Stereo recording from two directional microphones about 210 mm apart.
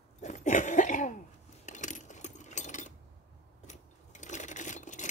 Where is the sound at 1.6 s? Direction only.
35° left (ahead or behind).